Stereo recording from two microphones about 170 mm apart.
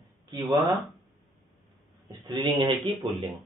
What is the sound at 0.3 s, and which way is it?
Speech, 20° right (ahead or behind).